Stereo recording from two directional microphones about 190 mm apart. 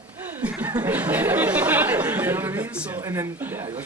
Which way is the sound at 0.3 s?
10° right (ahead or behind).